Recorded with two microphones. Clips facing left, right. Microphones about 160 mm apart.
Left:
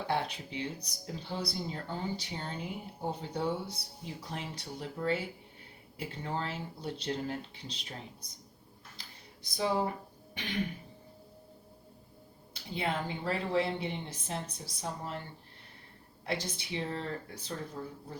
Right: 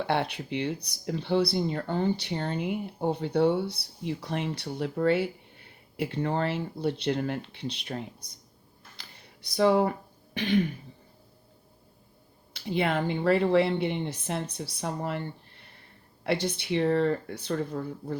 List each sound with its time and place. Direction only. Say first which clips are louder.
0.1 s speech: right 3 dB; 70° right (ahead or behind)
9.0 s a sound: right 1 dB; 65° right (ahead or behind)
12.5 s speech: right 7 dB; 70° right (ahead or behind)
16.2 s speech: right 8 dB; 65° right (ahead or behind)